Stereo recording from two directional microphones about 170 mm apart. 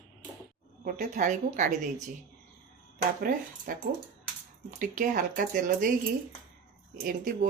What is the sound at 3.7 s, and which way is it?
Speech, 55° right (ahead or behind).